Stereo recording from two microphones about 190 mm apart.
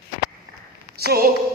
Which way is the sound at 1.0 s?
55° right (ahead or behind).